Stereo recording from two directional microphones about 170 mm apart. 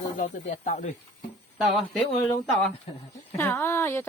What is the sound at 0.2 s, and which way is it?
Speech, 45° left (ahead or behind).